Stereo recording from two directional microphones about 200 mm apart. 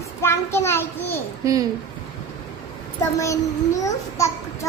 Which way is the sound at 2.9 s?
15° left (ahead or behind).